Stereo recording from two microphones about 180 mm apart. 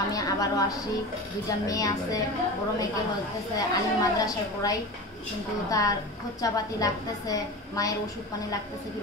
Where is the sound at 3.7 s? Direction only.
20° left (ahead or behind).